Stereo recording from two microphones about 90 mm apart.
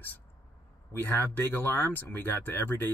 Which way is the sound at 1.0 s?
20° left (ahead or behind).